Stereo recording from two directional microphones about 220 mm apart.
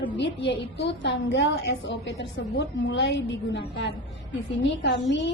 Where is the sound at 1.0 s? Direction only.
50° left (ahead or behind).